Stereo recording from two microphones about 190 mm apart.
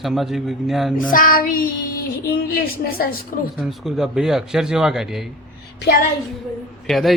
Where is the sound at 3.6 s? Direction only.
Centre (ahead or behind).